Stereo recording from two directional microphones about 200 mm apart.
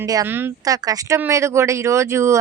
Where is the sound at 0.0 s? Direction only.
15° right (ahead or behind).